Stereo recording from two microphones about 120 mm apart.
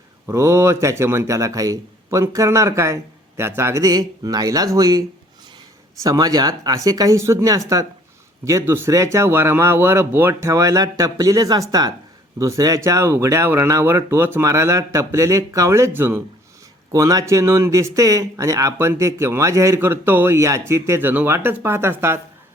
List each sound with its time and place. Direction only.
0.3 s speech: 20° right (ahead or behind)
16.9 s speech: 30° right (ahead or behind)